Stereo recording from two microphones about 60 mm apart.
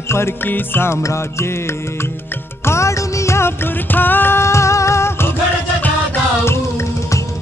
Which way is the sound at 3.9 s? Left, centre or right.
Left.